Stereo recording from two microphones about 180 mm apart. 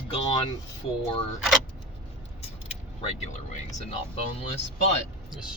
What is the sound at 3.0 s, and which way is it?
Speech, 40° left (ahead or behind).